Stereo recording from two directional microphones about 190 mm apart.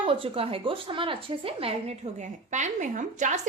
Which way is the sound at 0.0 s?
30° right (ahead or behind).